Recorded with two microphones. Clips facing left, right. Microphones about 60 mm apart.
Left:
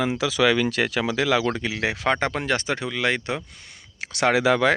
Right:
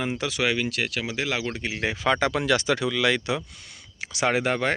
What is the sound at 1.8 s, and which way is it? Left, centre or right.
Speech, left.